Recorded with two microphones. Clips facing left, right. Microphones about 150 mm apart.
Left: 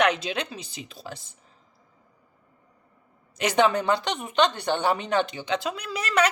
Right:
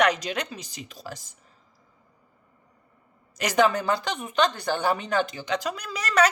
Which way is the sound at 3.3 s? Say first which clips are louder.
Even; 30° left (ahead or behind).